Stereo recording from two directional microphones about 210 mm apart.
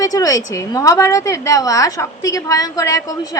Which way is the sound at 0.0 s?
15° left (ahead or behind).